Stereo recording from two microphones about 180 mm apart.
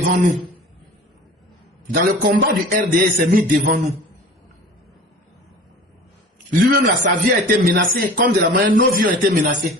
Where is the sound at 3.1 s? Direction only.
50° right (ahead or behind).